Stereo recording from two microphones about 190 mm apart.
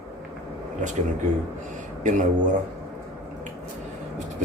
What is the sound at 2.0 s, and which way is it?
Speech, 40° right (ahead or behind).